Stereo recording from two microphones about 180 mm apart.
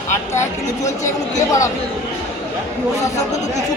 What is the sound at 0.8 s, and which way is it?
Speech, 15° left (ahead or behind).